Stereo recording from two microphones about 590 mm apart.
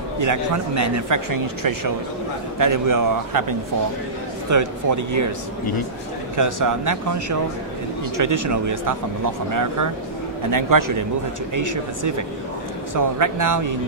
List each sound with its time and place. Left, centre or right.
0.2 s speech: right
6.3 s speech: right